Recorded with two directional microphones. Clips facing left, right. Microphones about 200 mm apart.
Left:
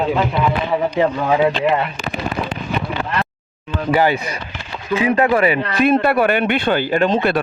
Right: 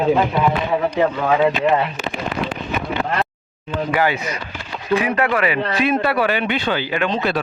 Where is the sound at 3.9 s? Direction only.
30° left (ahead or behind).